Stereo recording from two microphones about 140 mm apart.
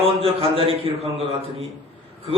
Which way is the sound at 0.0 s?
45° right (ahead or behind).